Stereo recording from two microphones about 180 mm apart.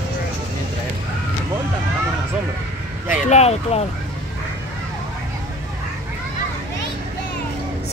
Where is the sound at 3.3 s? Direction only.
35° left (ahead or behind).